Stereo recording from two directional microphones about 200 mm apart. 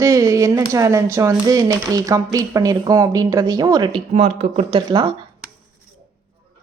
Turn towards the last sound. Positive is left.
turn(degrees=-25)  # may be behind; listen again after turning